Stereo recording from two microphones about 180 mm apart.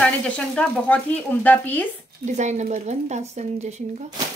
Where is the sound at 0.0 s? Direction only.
5° left (ahead or behind).